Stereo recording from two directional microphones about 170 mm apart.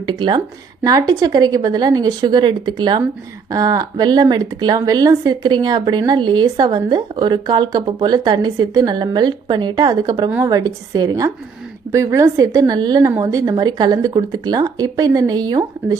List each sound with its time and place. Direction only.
0.0 s a woman's voice: 25° right (ahead or behind)